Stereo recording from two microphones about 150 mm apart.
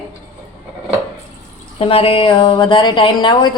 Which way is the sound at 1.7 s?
40° left (ahead or behind).